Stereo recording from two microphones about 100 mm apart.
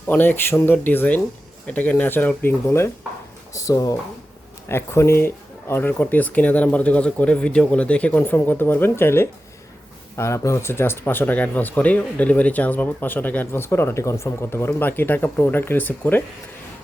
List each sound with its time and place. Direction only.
0.1 s speech: 20° left (ahead or behind)